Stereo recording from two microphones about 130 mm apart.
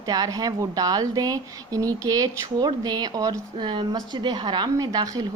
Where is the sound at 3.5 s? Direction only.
40° right (ahead or behind).